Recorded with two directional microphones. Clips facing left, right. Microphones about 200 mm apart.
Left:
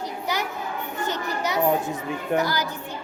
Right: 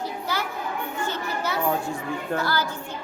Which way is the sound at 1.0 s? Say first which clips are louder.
Left 3 dB; 20° left (ahead or behind).